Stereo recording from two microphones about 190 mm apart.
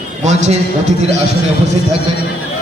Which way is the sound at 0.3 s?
35° right (ahead or behind).